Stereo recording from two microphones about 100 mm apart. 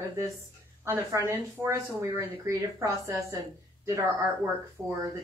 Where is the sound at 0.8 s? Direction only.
25° right (ahead or behind).